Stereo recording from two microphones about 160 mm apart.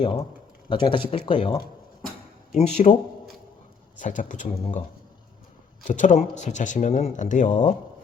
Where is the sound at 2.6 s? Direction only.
45° left (ahead or behind).